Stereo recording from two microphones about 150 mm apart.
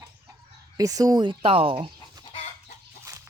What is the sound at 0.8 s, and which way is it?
Speech, 25° right (ahead or behind).